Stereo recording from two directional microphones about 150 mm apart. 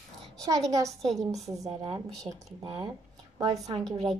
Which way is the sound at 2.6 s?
40° right (ahead or behind).